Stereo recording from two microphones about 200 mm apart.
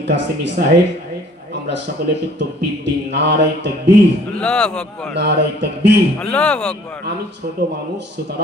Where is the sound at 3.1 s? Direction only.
55° right (ahead or behind).